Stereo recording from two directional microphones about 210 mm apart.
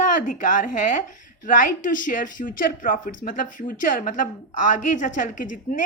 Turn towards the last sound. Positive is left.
turn(degrees=40)  # may be behind; listen again after turning